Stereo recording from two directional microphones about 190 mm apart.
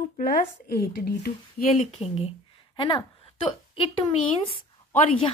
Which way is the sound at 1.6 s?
35° left (ahead or behind).